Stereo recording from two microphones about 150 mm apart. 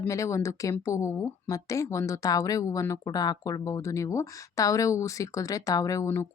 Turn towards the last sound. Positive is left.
turn(degrees=20)  # may be behind; listen again after turning